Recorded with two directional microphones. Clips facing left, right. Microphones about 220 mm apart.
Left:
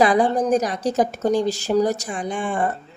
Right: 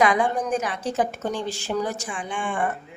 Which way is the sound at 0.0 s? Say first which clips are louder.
Left 4 dB; 35° left (ahead or behind).